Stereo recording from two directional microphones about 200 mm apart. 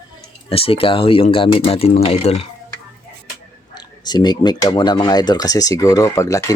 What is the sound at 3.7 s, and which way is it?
Speech, 20° left (ahead or behind).